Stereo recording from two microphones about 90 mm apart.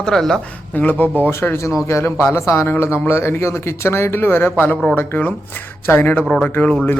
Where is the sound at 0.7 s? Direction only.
20° left (ahead or behind).